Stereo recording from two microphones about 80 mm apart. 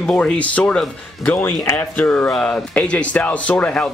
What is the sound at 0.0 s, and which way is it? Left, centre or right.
Speech, centre.